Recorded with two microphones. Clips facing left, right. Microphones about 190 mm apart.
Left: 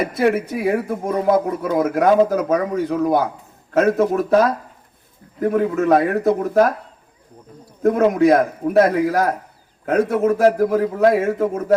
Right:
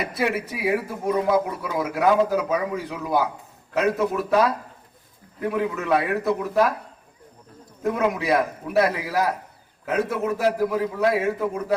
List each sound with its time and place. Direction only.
0.2 s speech: 50° left (ahead or behind)
7.8 s speech: 45° left (ahead or behind)